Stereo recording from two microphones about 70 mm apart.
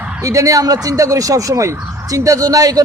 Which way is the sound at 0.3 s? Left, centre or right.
Right.